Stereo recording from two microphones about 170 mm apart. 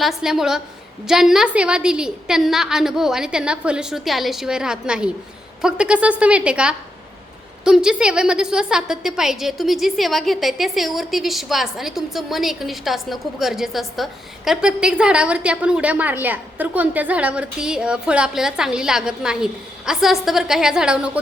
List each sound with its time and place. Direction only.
0.0 s a woman's voice: centre (ahead or behind)